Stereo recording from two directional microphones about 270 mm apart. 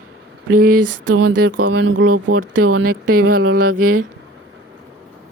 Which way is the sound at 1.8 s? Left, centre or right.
Right.